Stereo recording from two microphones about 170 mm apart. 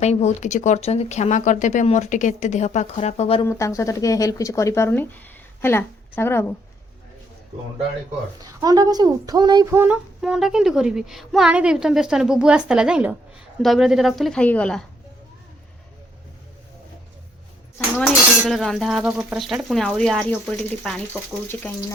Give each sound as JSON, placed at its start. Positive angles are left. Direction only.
{"t": 0.0, "sound": "speech", "side_deg": 40}
{"t": 3.4, "sound": "speech", "side_deg": 15}
{"t": 8.4, "sound": "speech", "side_deg": -20}
{"t": 9.7, "sound": "a sound", "side_deg": -10}
{"t": 10.2, "sound": "speech", "side_deg": 0}
{"t": 17.9, "sound": "speech", "side_deg": 0}